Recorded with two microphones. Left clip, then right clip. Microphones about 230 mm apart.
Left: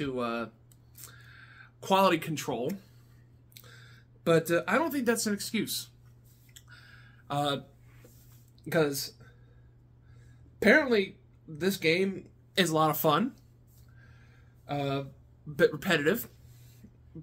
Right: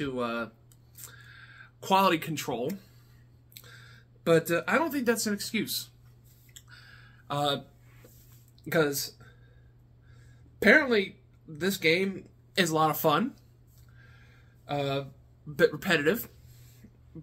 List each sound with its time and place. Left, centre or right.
0.0 s speech: centre
0.9 s a sound: centre
3.5 s speech: centre
6.5 s a sound: centre
8.6 s speech: centre
10.6 s speech: centre
14.7 s speech: centre